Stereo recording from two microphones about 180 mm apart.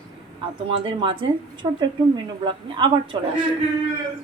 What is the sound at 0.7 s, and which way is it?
Speech, 30° right (ahead or behind).